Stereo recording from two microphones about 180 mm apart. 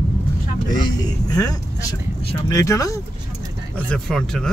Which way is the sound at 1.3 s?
20° left (ahead or behind).